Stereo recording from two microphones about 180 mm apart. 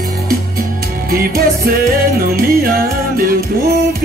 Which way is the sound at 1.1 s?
55° right (ahead or behind).